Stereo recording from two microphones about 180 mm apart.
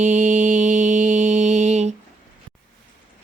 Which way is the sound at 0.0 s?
40° right (ahead or behind).